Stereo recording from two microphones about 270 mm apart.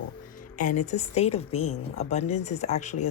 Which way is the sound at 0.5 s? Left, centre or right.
Left.